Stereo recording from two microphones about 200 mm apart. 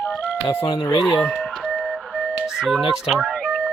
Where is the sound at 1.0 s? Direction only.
Centre (ahead or behind).